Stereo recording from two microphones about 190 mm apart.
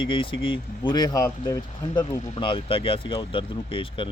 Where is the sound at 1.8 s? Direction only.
30° left (ahead or behind).